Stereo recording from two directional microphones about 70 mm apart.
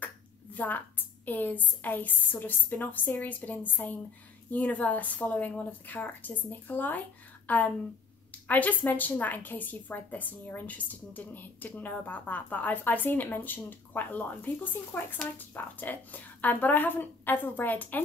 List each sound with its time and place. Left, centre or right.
0.0 s a woman's voice: left